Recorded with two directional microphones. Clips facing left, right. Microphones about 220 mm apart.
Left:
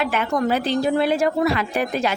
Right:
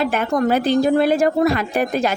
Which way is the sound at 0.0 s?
45° right (ahead or behind).